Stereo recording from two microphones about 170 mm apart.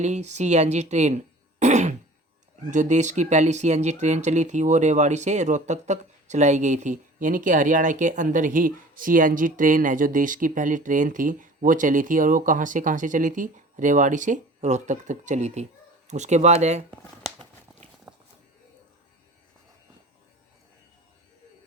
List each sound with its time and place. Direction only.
0.0 s speech: 40° right (ahead or behind)
18.1 s walk: 10° right (ahead or behind)